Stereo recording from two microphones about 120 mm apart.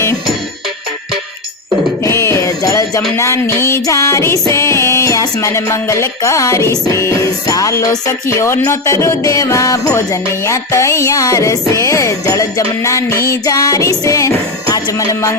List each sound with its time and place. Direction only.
2.0 s music: 20° left (ahead or behind)